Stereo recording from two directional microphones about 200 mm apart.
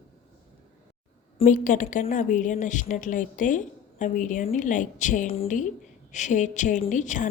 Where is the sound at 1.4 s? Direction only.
40° left (ahead or behind).